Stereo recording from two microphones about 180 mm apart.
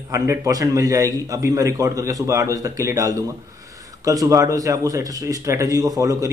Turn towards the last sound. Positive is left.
turn(degrees=-20)  # may be behind; listen again after turning